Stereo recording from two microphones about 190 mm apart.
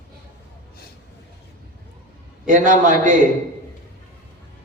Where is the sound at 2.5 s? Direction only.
45° right (ahead or behind).